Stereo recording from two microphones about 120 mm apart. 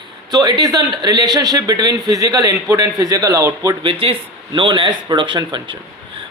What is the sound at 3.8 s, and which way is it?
Speech, 45° right (ahead or behind).